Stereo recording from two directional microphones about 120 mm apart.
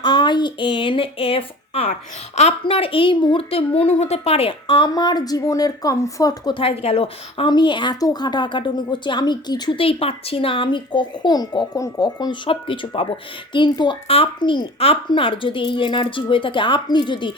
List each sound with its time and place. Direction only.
0.0 s speech: 40° left (ahead or behind)
1.9 s a woman's voice: 65° left (ahead or behind); by 4.9 s 45° left (ahead or behind)
4.9 s speech: 35° left (ahead or behind)
6.5 s speech: 50° left (ahead or behind); by 12.4 s 35° left (ahead or behind)
12.5 s a woman's voice: 45° left (ahead or behind)